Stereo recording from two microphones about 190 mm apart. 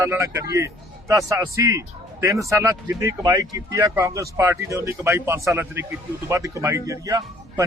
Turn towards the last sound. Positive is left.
turn(degrees=-15)  # may be behind; listen again after turning